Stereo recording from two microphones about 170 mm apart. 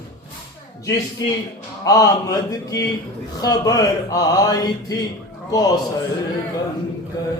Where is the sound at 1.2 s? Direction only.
20° left (ahead or behind).